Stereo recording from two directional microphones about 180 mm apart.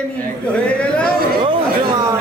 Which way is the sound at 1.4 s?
30° right (ahead or behind).